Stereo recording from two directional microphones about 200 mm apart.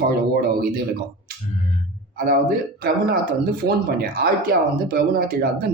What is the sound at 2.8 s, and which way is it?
A woman's voice, 45° right (ahead or behind).